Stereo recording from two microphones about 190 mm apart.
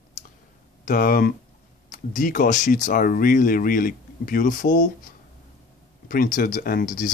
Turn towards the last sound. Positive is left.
turn(degrees=45)  # may be behind; listen again after turning